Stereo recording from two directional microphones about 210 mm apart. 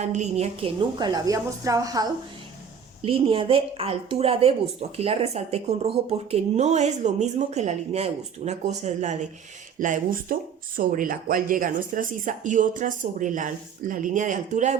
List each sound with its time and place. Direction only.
0.0 s speech: 35° right (ahead or behind)